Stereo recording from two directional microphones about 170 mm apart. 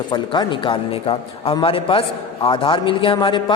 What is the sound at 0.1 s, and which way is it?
A man's voice, 30° left (ahead or behind).